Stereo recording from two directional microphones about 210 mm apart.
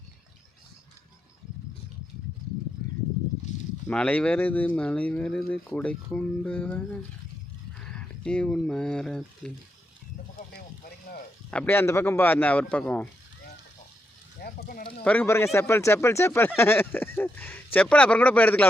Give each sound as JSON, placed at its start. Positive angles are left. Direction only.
{"t": 3.8, "sound": "speech", "side_deg": 5}
{"t": 11.5, "sound": "speech", "side_deg": 10}
{"t": 14.4, "sound": "speech", "side_deg": 45}
{"t": 15.0, "sound": "speech", "side_deg": 5}